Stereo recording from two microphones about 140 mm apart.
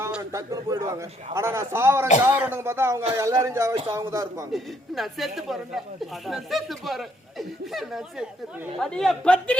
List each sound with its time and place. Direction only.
0.3 s a man's voice: 20° right (ahead or behind)
4.5 s speech: centre (ahead or behind)